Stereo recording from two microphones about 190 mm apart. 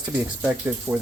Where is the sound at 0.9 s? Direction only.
15° right (ahead or behind).